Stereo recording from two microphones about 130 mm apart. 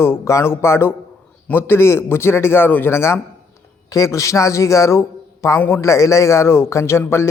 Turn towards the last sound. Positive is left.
turn(degrees=20)  # may be behind; listen again after turning